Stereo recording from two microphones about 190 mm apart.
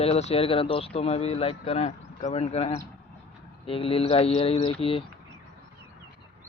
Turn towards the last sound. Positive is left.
turn(degrees=30)  # may be behind; listen again after turning